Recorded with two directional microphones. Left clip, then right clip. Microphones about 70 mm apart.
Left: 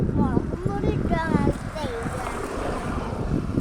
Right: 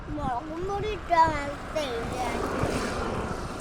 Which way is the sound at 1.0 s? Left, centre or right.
Right.